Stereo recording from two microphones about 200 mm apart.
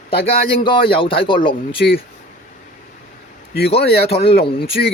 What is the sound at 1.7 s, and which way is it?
Speech, 50° left (ahead or behind).